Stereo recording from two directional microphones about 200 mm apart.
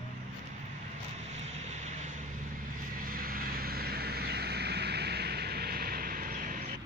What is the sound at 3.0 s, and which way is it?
Vehicle, 45° right (ahead or behind).